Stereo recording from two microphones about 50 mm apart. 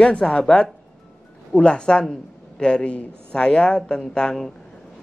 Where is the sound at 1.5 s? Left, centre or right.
Centre.